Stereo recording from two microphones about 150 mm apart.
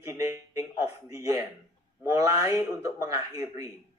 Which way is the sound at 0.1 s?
20° right (ahead or behind).